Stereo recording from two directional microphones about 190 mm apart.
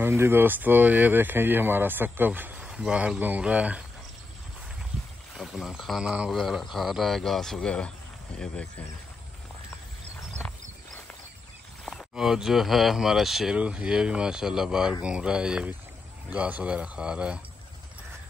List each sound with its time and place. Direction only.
0.0 s speech: 10° right (ahead or behind)
5.4 s speech: centre (ahead or behind)
11.8 s speech: centre (ahead or behind)